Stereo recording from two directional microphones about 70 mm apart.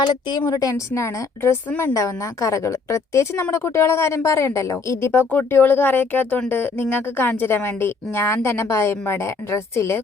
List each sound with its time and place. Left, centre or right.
0.0 s a woman's voice: left
0.5 s a woman's voice: left
5.3 s a woman's voice: left